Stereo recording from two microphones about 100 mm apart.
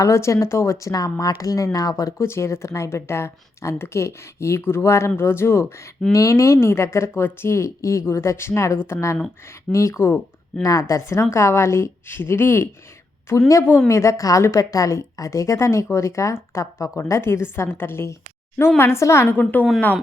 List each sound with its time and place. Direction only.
0.0 s speech: 30° left (ahead or behind)